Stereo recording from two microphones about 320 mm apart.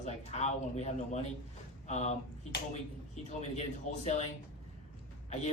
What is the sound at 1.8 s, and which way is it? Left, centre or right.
Finger snapping, left.